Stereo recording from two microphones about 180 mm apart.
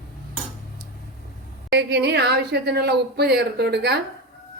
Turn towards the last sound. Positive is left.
turn(degrees=-65)  # may be behind; listen again after turning